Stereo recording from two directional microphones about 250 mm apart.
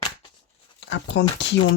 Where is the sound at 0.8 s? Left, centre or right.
Left.